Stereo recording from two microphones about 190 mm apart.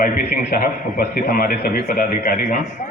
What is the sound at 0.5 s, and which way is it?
A man's voice, 50° left (ahead or behind).